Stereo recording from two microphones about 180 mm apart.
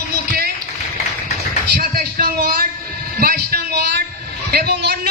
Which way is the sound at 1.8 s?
55° right (ahead or behind).